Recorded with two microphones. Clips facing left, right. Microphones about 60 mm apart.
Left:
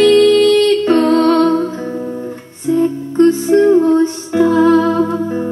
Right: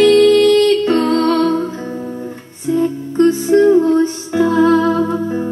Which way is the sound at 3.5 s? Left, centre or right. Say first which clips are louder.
Right 2 dB; left.